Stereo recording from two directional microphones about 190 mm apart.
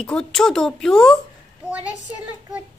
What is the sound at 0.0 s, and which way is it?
Speech, 5° left (ahead or behind).